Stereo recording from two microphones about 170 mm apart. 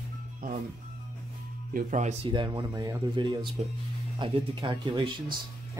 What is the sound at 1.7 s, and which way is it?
Speech, 45° right (ahead or behind).